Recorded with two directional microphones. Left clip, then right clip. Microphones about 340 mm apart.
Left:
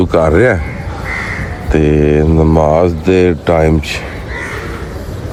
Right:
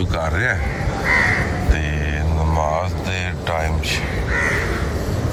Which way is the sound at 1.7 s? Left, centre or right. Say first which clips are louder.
Left 14 dB; centre.